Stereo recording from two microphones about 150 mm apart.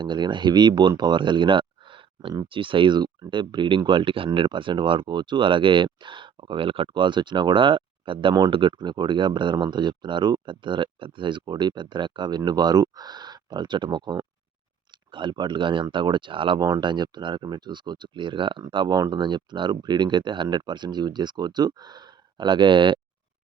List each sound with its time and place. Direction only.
0.0 s speech: 30° right (ahead or behind)